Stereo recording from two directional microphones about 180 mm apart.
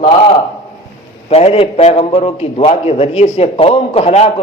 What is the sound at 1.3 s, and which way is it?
A man's voice, 35° left (ahead or behind).